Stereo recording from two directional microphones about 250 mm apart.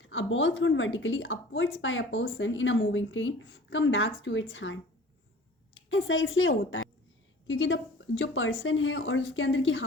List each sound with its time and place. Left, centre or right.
0.0 s a woman's voice: left